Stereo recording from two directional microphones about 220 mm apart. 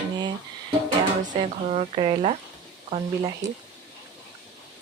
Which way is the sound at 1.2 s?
30° right (ahead or behind).